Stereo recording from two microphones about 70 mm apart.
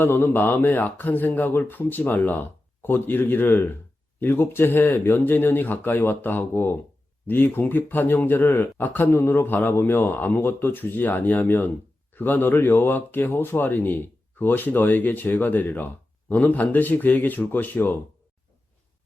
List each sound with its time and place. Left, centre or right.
0.0 s speech: left